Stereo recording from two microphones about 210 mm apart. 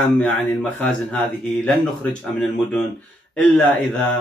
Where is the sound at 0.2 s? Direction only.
5° left (ahead or behind).